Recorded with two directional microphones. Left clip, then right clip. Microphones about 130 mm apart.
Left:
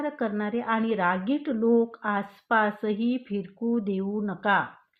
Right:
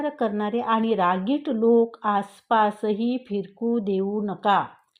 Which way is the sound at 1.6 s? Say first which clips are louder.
Right 5 dB; 25° right (ahead or behind).